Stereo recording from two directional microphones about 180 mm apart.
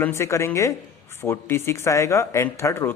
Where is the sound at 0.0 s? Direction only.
15° left (ahead or behind).